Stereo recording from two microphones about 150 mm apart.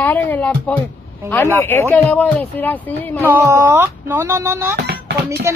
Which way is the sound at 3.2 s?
15° right (ahead or behind).